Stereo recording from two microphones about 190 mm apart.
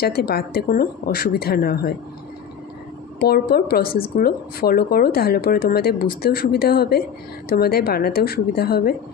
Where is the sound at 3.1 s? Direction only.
55° left (ahead or behind).